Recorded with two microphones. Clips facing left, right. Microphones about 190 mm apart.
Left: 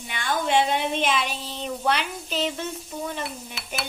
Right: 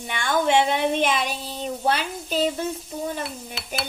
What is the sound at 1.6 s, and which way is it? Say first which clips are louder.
Speech: right 1 dB; 45° right (ahead or behind).